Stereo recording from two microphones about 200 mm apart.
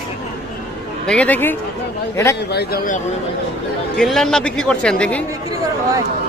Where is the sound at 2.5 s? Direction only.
50° left (ahead or behind).